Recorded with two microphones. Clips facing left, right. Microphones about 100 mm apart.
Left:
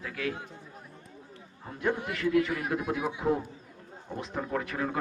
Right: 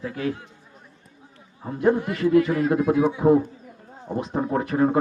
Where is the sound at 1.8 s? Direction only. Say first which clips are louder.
Right 9 dB; 50° right (ahead or behind).